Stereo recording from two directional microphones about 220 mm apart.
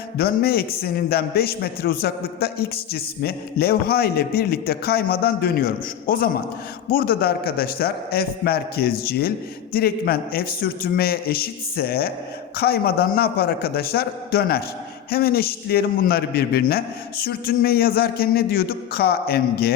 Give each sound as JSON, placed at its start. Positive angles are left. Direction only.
{"t": 0.2, "sound": "a man's voice", "side_deg": 45}